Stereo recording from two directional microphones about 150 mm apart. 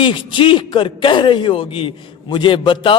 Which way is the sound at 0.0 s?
35° left (ahead or behind).